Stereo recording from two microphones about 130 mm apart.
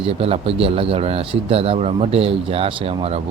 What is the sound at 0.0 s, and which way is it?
Speech, 45° right (ahead or behind).